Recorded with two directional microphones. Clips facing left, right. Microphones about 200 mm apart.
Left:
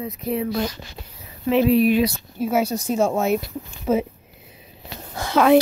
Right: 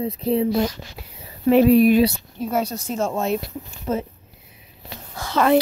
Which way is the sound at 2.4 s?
5° left (ahead or behind).